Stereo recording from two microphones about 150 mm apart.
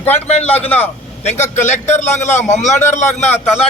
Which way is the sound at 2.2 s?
50° left (ahead or behind).